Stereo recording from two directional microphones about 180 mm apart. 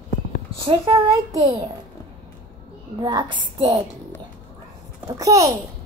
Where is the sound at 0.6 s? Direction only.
30° right (ahead or behind).